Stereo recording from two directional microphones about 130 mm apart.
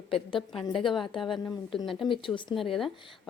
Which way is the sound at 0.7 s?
Centre (ahead or behind).